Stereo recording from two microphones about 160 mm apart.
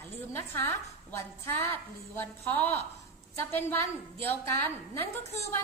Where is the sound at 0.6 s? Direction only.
15° left (ahead or behind).